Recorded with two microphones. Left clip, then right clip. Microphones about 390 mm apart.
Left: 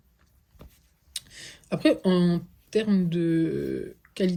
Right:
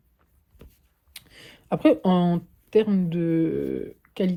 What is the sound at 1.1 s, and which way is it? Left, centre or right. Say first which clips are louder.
Speech: left 6 dB; centre.